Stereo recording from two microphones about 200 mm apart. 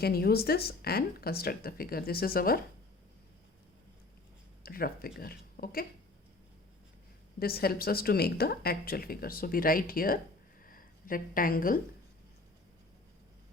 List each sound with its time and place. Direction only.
0.0 s a woman's voice: 50° left (ahead or behind)
4.6 s a woman's voice: 50° left (ahead or behind)
7.3 s a woman's voice: 50° left (ahead or behind)
10.6 s a sound: 45° left (ahead or behind)